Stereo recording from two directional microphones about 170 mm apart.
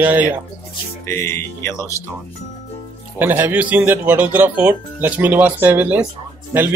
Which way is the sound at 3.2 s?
10° right (ahead or behind).